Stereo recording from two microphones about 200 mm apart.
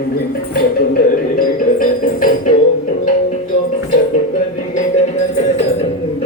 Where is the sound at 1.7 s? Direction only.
45° left (ahead or behind).